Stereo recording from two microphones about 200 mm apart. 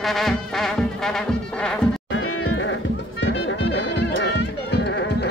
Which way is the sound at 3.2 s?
70° left (ahead or behind).